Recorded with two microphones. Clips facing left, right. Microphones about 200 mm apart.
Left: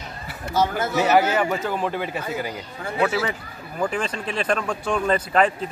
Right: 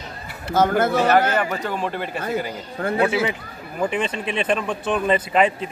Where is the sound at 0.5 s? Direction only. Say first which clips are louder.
Right 4 dB; 55° right (ahead or behind).